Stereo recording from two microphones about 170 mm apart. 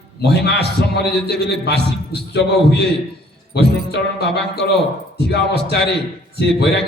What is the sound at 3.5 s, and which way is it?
A man's voice, 75° left (ahead or behind).